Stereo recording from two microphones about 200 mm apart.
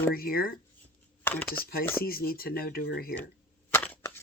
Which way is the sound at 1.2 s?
10° left (ahead or behind).